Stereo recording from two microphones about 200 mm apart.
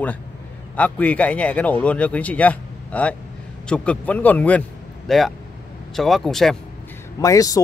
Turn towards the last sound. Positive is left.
turn(degrees=15)  # may be behind; listen again after turning